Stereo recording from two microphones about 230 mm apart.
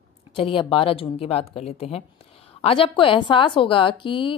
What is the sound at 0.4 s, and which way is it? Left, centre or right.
Speech, left.